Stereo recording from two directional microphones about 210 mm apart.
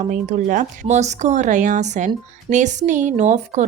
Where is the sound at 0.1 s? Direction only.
35° right (ahead or behind).